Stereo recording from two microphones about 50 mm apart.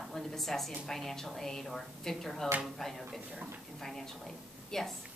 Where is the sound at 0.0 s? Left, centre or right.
Centre.